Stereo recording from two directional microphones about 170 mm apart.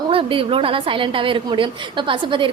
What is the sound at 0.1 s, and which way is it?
A woman's voice, 30° right (ahead or behind).